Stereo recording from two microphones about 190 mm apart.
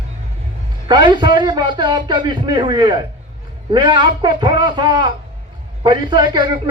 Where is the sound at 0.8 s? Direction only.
25° right (ahead or behind).